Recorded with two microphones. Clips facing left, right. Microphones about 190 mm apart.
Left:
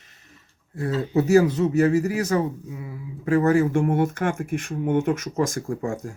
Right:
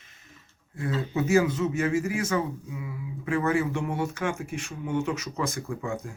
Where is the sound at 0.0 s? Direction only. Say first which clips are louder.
Left 1 dB; 40° left (ahead or behind).